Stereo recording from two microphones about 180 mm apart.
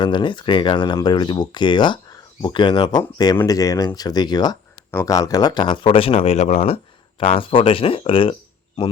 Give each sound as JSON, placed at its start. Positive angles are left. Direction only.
{"t": 0.0, "sound": "speech", "side_deg": 25}